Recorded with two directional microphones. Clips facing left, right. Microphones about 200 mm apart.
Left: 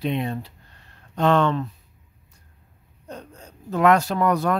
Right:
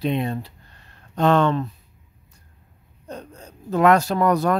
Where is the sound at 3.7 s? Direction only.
40° right (ahead or behind).